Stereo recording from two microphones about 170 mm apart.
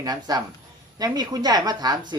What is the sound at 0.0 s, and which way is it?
Speech, 25° right (ahead or behind).